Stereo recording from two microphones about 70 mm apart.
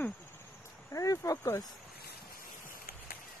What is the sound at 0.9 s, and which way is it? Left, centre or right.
Speech, left.